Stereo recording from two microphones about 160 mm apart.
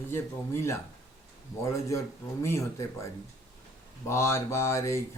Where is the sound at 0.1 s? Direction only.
15° left (ahead or behind).